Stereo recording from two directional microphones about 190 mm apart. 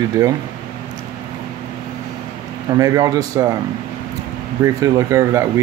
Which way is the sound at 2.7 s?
20° right (ahead or behind).